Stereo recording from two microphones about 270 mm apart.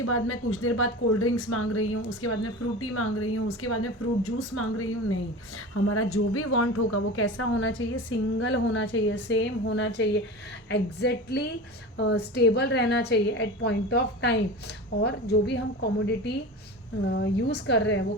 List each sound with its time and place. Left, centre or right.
0.0 s a woman's voice: left